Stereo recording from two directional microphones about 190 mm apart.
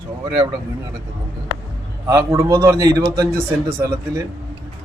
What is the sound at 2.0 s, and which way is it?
A man's voice, 15° right (ahead or behind).